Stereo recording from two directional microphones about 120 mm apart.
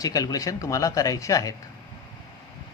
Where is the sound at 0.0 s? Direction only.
30° left (ahead or behind).